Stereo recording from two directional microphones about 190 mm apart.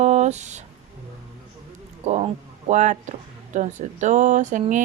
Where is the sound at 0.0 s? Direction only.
35° right (ahead or behind).